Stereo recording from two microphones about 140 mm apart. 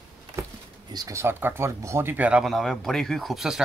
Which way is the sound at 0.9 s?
20° right (ahead or behind).